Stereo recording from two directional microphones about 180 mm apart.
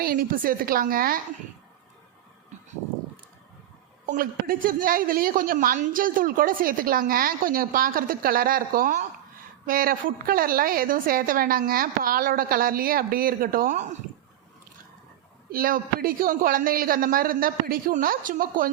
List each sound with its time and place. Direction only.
0.0 s a woman's voice: 55° right (ahead or behind)
4.0 s a woman's voice: 50° right (ahead or behind)
15.5 s a woman's voice: 55° right (ahead or behind)